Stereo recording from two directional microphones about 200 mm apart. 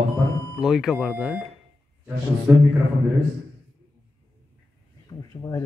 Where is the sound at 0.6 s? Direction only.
Centre (ahead or behind).